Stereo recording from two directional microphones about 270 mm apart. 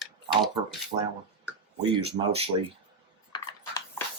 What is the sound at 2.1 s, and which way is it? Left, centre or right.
Speech, right.